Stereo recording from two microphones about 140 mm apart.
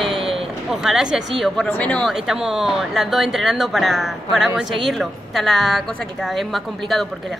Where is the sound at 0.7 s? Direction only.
5° right (ahead or behind).